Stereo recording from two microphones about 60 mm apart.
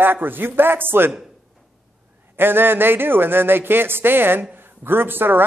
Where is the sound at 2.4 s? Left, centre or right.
Right.